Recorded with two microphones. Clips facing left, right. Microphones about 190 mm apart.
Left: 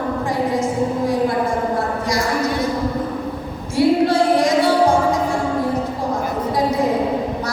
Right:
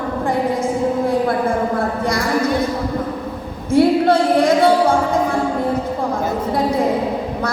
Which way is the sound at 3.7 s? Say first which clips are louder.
Right 2 dB; 55° right (ahead or behind).